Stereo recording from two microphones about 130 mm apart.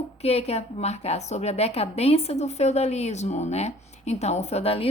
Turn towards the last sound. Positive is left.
turn(degrees=50)  # may be behind; listen again after turning